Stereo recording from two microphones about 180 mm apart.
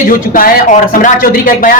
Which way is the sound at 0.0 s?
50° left (ahead or behind).